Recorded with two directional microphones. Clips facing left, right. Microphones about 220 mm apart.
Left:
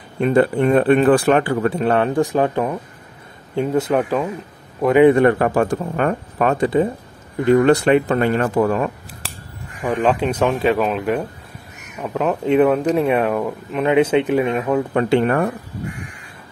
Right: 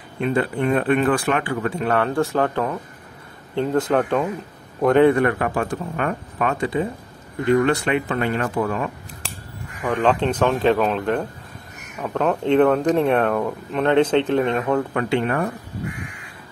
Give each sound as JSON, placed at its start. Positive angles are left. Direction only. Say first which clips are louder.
{"t": 0.2, "sound": "speech", "louder": "left 6 dB", "side_deg": 40}
{"t": 2.0, "sound": "speech", "louder": "left 3 dB", "side_deg": 15}
{"t": 5.1, "sound": "speech", "louder": "left 5 dB", "side_deg": 30}
{"t": 9.2, "sound": "scissors", "louder": "left 1 dB", "side_deg": 5}
{"t": 9.8, "sound": "speech", "louder": "left 1 dB", "side_deg": 15}
{"t": 15.0, "sound": "speech", "louder": "left 5 dB", "side_deg": 40}